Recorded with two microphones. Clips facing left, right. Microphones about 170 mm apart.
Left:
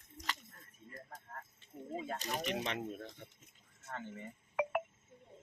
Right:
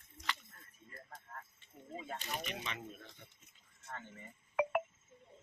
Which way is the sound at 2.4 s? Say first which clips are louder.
Left 7 dB; 65° left (ahead or behind).